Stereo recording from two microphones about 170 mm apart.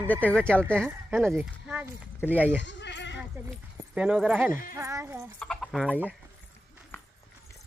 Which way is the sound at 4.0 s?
5° right (ahead or behind).